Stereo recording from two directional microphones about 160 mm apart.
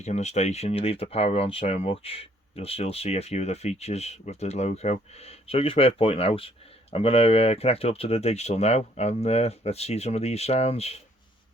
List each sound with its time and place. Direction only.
0.0 s speech: 45° left (ahead or behind)